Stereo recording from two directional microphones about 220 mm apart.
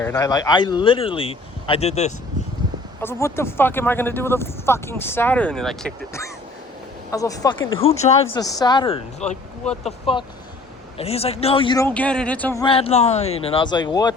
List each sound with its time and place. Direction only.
0.0 s speech: 15° left (ahead or behind)
3.0 s speech: 10° left (ahead or behind)
7.1 s speech: 15° left (ahead or behind)
7.7 s speech: 25° left (ahead or behind)
8.3 s speech: 15° left (ahead or behind)
11.9 s speech: 5° left (ahead or behind)
12.6 s speech: 25° left (ahead or behind)